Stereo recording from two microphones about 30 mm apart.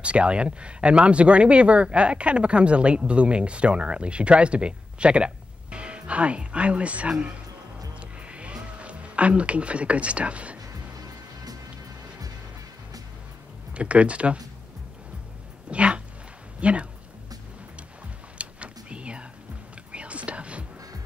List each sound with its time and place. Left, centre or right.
0.0 s speech: right
8.0 s music: right
13.7 s speech: right
15.7 s speech: right
18.4 s a sound: right
19.9 s whispering: right